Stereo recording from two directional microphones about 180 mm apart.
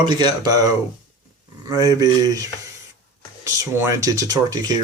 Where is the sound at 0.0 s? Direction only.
25° right (ahead or behind).